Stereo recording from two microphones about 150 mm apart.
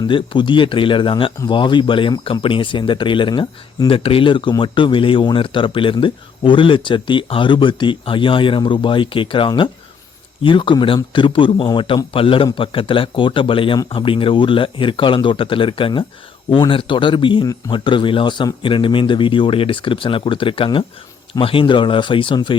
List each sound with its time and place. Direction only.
0.0 s speech: 30° left (ahead or behind)